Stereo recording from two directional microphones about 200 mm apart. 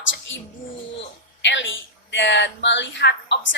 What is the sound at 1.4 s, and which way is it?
A woman's voice, 70° left (ahead or behind).